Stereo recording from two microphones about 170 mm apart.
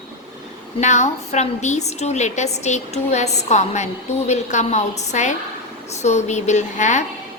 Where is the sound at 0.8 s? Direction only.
45° left (ahead or behind).